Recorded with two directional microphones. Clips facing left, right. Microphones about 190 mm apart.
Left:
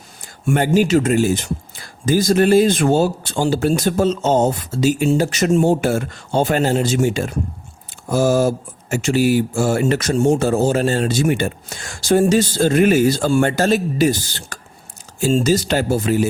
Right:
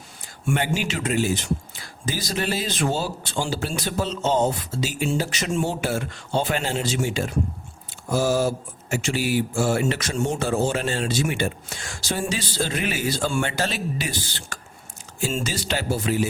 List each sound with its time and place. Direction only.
0.4 s speech: 40° left (ahead or behind)